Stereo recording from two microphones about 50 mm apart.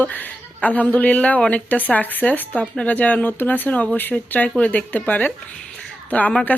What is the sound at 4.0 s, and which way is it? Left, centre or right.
A woman's voice, left.